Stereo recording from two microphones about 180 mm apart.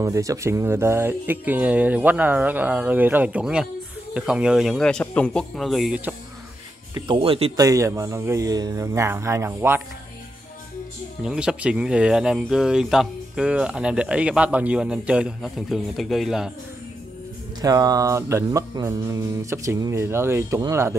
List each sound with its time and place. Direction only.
0.0 s speech: 20° right (ahead or behind)
6.9 s speech: 30° right (ahead or behind)
7.5 s speech: 20° right (ahead or behind)
11.2 s speech: 5° right (ahead or behind)
17.6 s speech: 20° right (ahead or behind)